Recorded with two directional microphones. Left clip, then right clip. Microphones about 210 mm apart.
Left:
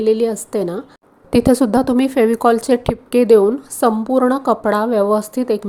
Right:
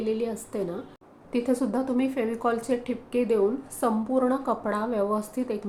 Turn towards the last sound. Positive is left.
turn(degrees=40)  # may be behind; listen again after turning